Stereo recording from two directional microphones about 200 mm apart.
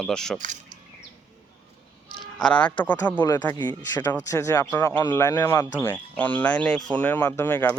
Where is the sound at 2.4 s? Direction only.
5° left (ahead or behind).